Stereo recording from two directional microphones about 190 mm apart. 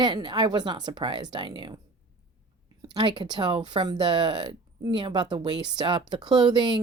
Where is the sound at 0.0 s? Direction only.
20° right (ahead or behind).